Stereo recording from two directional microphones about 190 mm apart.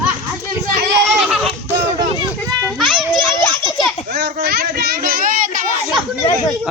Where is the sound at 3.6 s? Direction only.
20° left (ahead or behind).